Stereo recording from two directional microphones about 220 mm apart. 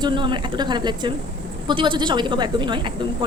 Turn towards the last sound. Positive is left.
turn(degrees=-20)  # may be behind; listen again after turning